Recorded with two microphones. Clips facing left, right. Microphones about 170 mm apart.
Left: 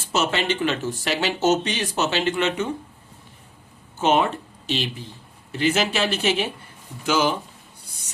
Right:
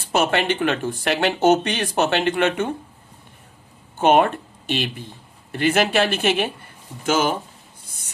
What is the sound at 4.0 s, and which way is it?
Speech, 55° right (ahead or behind).